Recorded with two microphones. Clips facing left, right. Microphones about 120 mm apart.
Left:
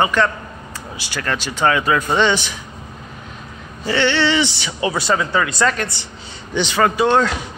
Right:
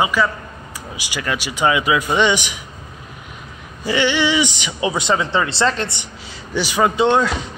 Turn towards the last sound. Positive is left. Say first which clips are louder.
# even
turn(degrees=-20)  # may be behind; listen again after turning